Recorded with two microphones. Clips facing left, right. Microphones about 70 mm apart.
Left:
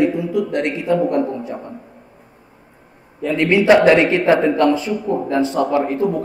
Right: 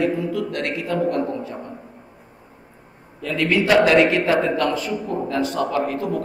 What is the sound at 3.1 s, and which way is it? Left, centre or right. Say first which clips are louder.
A man's voice: left 4 dB; left.